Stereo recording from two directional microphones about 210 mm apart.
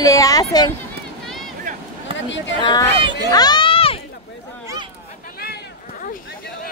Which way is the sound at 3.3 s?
20° left (ahead or behind).